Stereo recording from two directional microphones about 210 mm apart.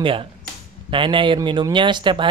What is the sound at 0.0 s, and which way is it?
Speech, 25° right (ahead or behind).